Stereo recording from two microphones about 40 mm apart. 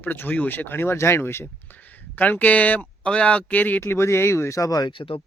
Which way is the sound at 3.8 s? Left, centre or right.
Left.